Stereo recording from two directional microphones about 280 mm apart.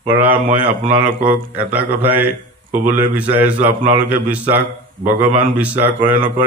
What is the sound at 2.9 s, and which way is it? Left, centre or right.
Mantra, centre.